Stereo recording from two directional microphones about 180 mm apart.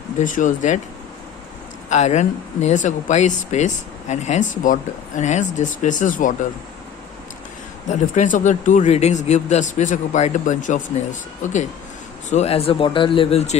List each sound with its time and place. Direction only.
0.2 s speech: 45° left (ahead or behind)
1.9 s speech: 40° left (ahead or behind)
7.9 s speech: 45° left (ahead or behind)